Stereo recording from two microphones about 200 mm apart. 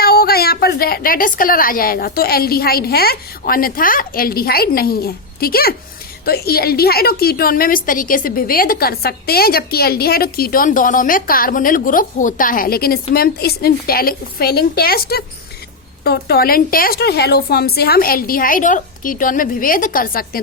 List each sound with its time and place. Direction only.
0.0 s a woman's voice: 50° left (ahead or behind)